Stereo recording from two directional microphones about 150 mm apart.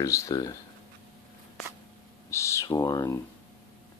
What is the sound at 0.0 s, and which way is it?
Speech, 20° left (ahead or behind).